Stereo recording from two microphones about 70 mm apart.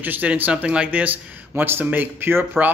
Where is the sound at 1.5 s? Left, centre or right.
Right.